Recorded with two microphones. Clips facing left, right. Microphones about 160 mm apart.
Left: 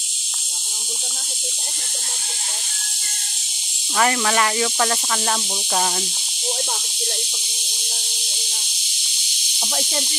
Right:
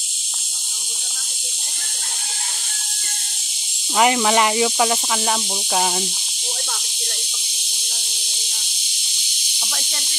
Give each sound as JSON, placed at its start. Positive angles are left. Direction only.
{"t": 3.9, "sound": "speech", "side_deg": -15}
{"t": 9.6, "sound": "speech", "side_deg": 25}